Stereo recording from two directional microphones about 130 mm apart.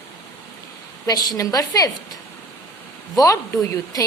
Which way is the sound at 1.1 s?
30° left (ahead or behind).